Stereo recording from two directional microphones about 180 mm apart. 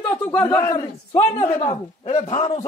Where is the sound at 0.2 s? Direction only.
10° left (ahead or behind).